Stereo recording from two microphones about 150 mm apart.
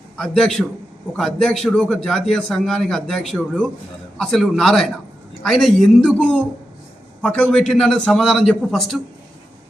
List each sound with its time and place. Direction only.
0.2 s a man's voice: 5° left (ahead or behind)